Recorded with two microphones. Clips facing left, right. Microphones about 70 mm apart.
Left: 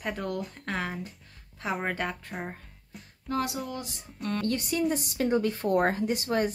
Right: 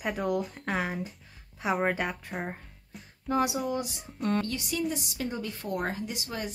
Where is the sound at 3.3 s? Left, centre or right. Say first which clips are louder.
Right 3 dB; centre.